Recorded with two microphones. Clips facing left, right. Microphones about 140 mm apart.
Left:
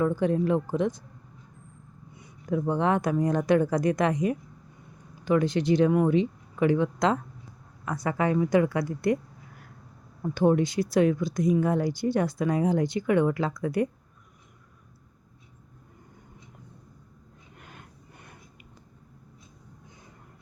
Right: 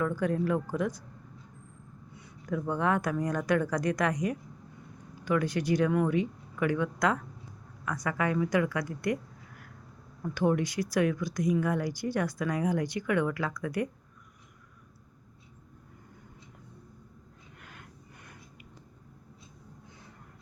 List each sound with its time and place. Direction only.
0.0 s speech: 25° left (ahead or behind)
2.1 s speech: 20° left (ahead or behind)
10.2 s speech: 25° left (ahead or behind)
17.6 s a sound: 25° left (ahead or behind)